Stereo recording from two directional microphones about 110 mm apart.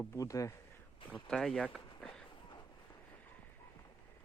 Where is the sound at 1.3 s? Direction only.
5° left (ahead or behind).